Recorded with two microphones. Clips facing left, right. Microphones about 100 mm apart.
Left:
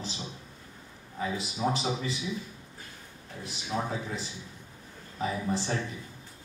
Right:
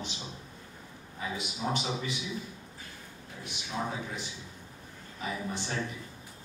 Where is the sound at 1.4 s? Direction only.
35° left (ahead or behind).